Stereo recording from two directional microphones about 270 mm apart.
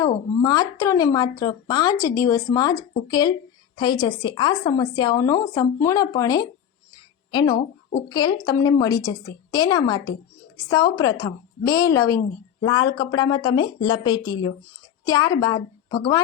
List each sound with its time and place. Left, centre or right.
0.4 s a woman's voice: centre